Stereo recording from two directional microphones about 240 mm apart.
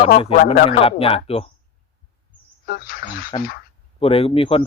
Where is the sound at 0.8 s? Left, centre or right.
Left.